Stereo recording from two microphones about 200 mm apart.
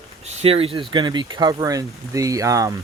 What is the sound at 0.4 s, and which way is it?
Speech, 30° right (ahead or behind).